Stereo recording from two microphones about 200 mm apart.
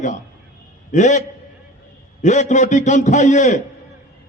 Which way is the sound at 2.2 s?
35° left (ahead or behind).